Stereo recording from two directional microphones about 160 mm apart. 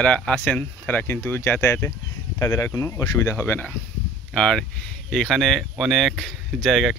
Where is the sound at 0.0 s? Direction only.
5° left (ahead or behind).